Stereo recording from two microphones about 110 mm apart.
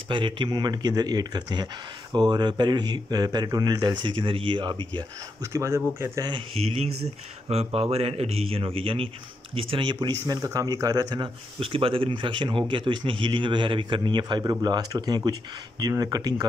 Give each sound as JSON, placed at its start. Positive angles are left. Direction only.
{"t": 0.1, "sound": "speech", "side_deg": -45}
{"t": 5.4, "sound": "speech", "side_deg": -25}
{"t": 6.6, "sound": "a man's voice", "side_deg": -65}
{"t": 11.6, "sound": "speech", "side_deg": -55}